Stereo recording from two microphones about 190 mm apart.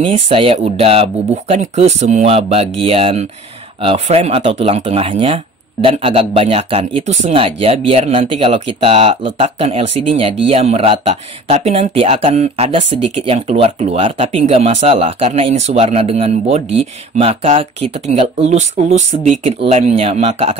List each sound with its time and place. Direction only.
0.0 s speech: 30° right (ahead or behind)